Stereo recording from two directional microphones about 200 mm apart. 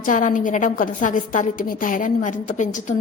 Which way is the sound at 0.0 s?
40° left (ahead or behind).